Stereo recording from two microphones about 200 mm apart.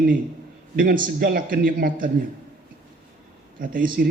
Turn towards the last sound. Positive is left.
turn(degrees=-45)  # may be behind; listen again after turning